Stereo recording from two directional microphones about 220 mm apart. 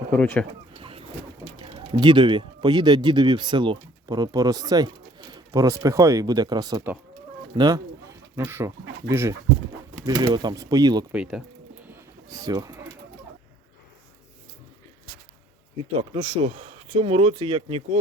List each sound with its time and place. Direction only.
0.2 s speech: 5° left (ahead or behind)
0.8 s vehicle: 25° right (ahead or behind)
1.9 s speech: 20° right (ahead or behind)
11.1 s speech: 5° right (ahead or behind)
11.9 s bird: 15° right (ahead or behind)
16.0 s speech: 25° right (ahead or behind)